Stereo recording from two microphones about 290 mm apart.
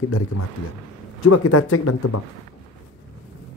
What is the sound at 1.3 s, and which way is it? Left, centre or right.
Speech, left.